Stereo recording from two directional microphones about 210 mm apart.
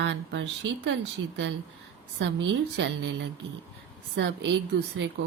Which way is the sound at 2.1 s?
55° right (ahead or behind).